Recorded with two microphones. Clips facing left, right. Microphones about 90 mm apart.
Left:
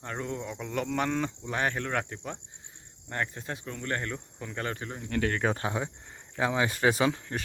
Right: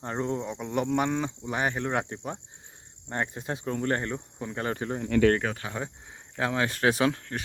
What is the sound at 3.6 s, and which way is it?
Speech, 35° right (ahead or behind).